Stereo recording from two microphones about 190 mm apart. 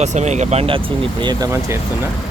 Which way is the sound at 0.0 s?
35° right (ahead or behind).